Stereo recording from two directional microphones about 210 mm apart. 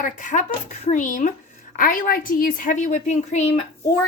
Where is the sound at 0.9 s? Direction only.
35° left (ahead or behind).